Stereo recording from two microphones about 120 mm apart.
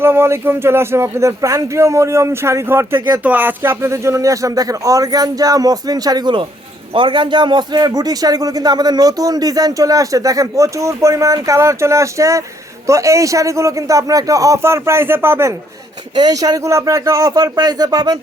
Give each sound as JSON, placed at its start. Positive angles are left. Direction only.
{"t": 0.0, "sound": "a man's voice", "side_deg": -20}
{"t": 16.1, "sound": "a man's voice", "side_deg": -30}